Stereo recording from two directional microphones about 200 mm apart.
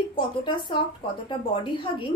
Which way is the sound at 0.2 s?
25° left (ahead or behind).